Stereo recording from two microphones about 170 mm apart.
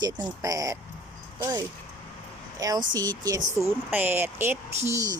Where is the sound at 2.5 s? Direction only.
20° right (ahead or behind).